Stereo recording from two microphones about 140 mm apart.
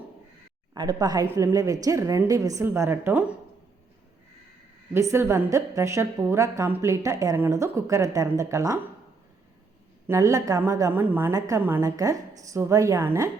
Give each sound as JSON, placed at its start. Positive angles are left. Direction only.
{"t": 0.7, "sound": "a woman's voice", "side_deg": -30}
{"t": 4.9, "sound": "a woman's voice", "side_deg": -20}
{"t": 10.1, "sound": "a woman's voice", "side_deg": -20}